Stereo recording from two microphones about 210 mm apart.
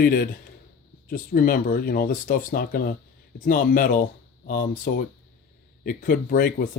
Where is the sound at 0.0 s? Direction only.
45° left (ahead or behind).